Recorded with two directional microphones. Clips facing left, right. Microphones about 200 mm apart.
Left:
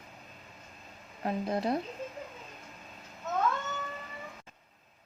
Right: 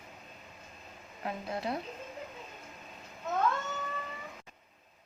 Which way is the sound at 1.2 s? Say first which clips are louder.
Left 5 dB; 40° left (ahead or behind).